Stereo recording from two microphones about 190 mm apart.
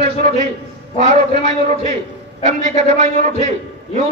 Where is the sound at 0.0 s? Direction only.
40° right (ahead or behind).